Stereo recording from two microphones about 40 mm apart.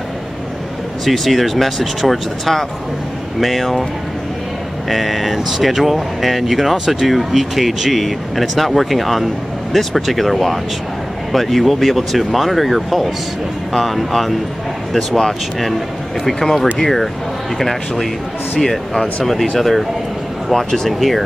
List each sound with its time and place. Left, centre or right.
1.0 s speech: centre
4.8 s speech: centre